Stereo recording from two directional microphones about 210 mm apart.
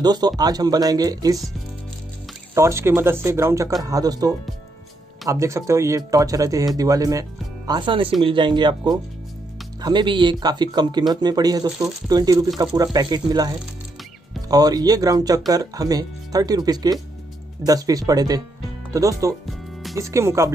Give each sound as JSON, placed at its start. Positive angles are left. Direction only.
{"t": 0.0, "sound": "speech", "side_deg": -20}
{"t": 2.5, "sound": "speech", "side_deg": -15}
{"t": 5.3, "sound": "speech", "side_deg": -15}